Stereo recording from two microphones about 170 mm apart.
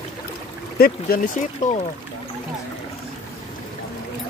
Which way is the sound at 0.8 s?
55° left (ahead or behind).